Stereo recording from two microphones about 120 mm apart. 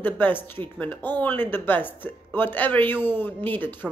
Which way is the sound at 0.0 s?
15° left (ahead or behind).